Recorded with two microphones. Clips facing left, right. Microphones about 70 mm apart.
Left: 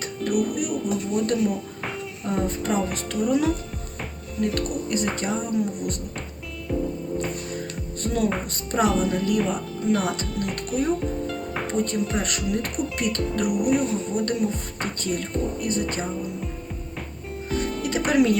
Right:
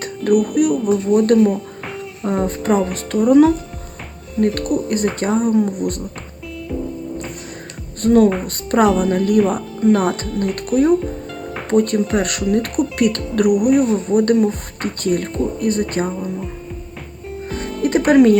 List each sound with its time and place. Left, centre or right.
0.5 s speech: right
8.0 s speech: right
13.6 s speech: centre
13.9 s speech: right
17.8 s speech: right